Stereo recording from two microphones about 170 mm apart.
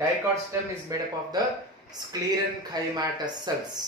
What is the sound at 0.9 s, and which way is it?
Speech, 20° right (ahead or behind).